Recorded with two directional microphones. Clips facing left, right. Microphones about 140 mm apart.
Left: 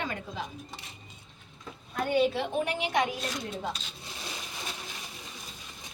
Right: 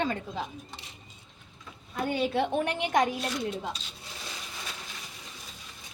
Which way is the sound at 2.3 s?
55° right (ahead or behind).